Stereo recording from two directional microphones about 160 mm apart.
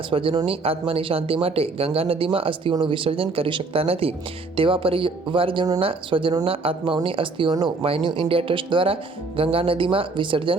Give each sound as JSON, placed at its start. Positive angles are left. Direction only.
{"t": 0.1, "sound": "speech", "side_deg": -35}